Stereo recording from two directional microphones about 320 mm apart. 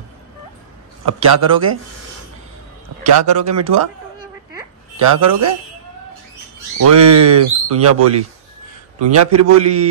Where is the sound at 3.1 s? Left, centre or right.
Right.